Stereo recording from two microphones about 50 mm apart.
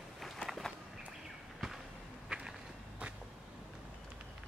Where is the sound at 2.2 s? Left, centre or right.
Centre.